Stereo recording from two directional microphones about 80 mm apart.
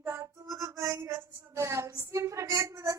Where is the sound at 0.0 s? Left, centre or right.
Right.